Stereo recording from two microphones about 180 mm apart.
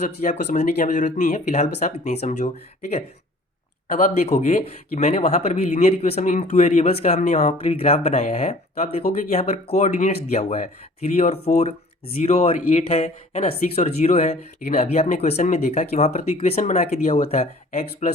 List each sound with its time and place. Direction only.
0.0 s speech: 40° left (ahead or behind)
3.9 s speech: 40° left (ahead or behind)